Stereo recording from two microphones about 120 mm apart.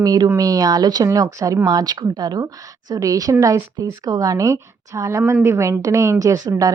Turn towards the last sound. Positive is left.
turn(degrees=-30)  # may be behind; listen again after turning